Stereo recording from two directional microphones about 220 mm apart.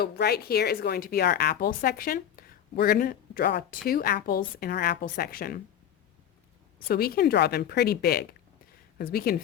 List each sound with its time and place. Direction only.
0.0 s speech: 45° left (ahead or behind)
6.8 s speech: 45° left (ahead or behind)